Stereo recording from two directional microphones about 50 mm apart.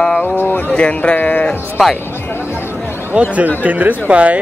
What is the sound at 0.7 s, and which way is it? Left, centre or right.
Speech, left.